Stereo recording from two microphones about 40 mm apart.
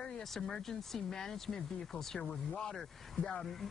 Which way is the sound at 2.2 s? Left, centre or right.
Centre.